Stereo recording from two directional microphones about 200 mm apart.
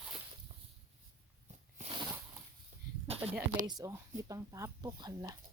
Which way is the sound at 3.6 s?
20° right (ahead or behind).